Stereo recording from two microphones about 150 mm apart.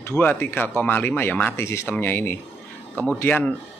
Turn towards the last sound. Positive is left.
turn(degrees=10)  # may be behind; listen again after turning